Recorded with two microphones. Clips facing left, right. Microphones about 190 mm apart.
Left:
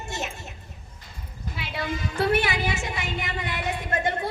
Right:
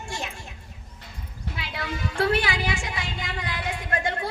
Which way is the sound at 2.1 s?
25° left (ahead or behind).